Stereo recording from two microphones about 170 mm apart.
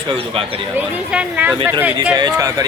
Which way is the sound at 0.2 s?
35° right (ahead or behind).